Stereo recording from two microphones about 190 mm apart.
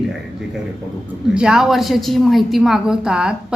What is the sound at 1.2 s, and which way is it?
A woman's voice, 5° right (ahead or behind).